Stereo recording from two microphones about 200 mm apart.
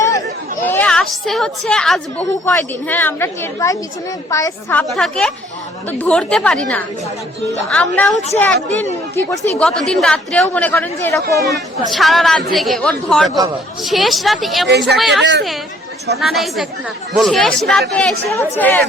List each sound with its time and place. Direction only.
0.6 s a woman's voice: 10° left (ahead or behind)
9.6 s a woman's voice: centre (ahead or behind)
14.7 s a woman's voice: 55° right (ahead or behind)
14.9 s a woman's voice: centre (ahead or behind)
16.2 s a woman's voice: centre (ahead or behind)